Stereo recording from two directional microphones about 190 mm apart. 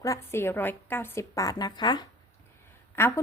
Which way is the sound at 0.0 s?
15° left (ahead or behind).